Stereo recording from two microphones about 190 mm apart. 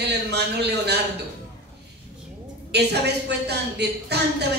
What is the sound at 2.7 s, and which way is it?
A woman's voice, 60° right (ahead or behind).